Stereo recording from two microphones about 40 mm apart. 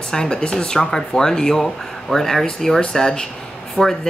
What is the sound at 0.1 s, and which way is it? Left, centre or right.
A woman's voice, centre.